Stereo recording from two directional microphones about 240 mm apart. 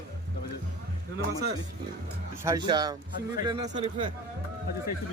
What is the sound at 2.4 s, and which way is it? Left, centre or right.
A man's voice, centre.